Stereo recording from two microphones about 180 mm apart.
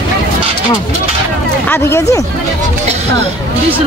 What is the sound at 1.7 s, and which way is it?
Speech, 15° left (ahead or behind).